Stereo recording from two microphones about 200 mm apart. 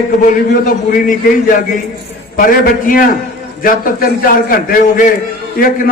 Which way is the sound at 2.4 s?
45° left (ahead or behind).